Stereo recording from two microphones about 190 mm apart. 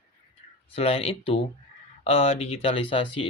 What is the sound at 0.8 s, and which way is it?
Speech, 30° left (ahead or behind).